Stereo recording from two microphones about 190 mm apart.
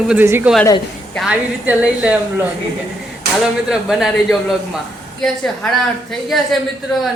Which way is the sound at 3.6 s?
5° right (ahead or behind).